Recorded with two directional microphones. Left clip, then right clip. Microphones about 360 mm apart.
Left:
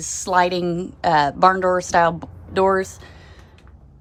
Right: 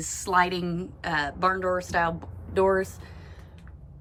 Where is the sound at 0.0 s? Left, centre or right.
Centre; by 3.0 s left.